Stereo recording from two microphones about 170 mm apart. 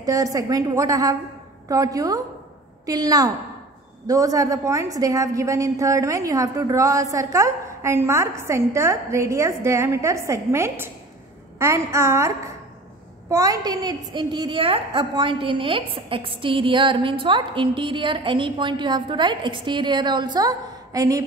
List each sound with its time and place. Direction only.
0.0 s a woman's voice: 20° right (ahead or behind)